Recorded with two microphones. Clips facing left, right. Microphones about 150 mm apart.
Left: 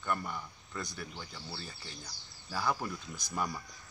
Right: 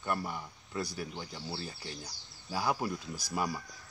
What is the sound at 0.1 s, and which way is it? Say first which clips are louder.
Speech: right 1 dB; 10° right (ahead or behind).